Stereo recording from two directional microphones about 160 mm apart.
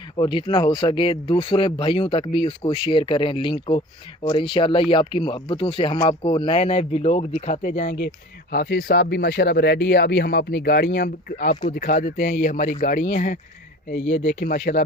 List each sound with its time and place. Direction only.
0.2 s speech: 30° left (ahead or behind); by 7.9 s 50° left (ahead or behind)
8.5 s speech: 75° left (ahead or behind)